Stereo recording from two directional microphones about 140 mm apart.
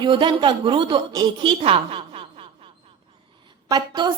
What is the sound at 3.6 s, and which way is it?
Speech, 30° right (ahead or behind).